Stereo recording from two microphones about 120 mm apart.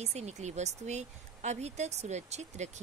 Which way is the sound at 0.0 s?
65° right (ahead or behind).